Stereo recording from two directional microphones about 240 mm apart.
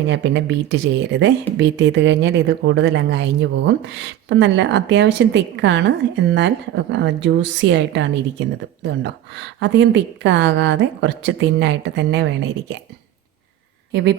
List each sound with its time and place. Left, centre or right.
0.1 s speech: right
13.9 s speech: right